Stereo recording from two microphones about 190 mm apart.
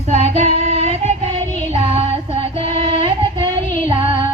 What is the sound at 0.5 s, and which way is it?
Singing, 35° right (ahead or behind).